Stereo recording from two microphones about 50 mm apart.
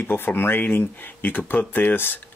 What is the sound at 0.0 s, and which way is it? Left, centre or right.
Speech, left.